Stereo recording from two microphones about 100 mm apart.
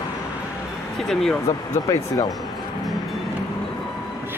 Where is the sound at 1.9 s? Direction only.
40° left (ahead or behind).